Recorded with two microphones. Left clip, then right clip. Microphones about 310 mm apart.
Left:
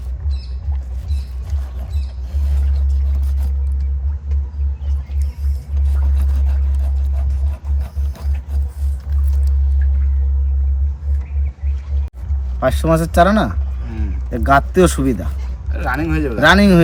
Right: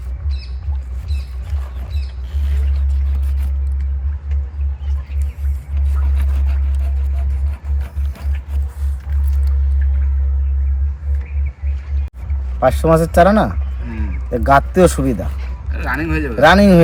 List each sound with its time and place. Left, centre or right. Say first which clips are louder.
12.5 s a man's voice: right 3 dB; centre
15.7 s speech: even; left
16.4 s speech: right 2 dB; centre